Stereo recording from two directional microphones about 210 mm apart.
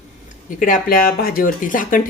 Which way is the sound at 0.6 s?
40° left (ahead or behind).